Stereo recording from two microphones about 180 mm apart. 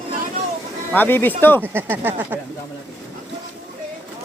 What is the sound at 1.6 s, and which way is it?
Speech, 10° right (ahead or behind).